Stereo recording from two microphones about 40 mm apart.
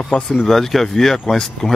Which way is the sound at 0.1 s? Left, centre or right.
Centre.